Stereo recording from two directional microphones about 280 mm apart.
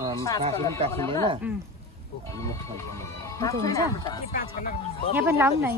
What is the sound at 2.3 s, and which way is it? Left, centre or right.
Speech, centre.